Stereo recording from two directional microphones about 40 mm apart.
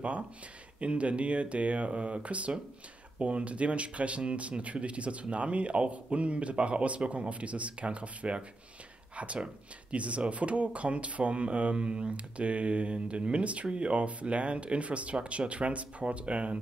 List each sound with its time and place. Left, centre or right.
0.7 s speech: right